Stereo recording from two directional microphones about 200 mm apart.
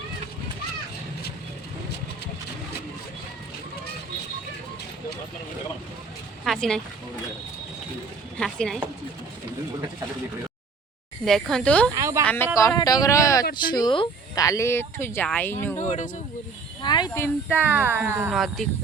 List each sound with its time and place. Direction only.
6.4 s speech: centre (ahead or behind)
8.4 s speech: 5° left (ahead or behind)
11.3 s speech: centre (ahead or behind)
11.9 s speech: 15° right (ahead or behind)
12.2 s speech: 10° left (ahead or behind)
15.8 s speech: 40° left (ahead or behind)
16.8 s speech: 20° left (ahead or behind)
17.7 s speech: 5° right (ahead or behind)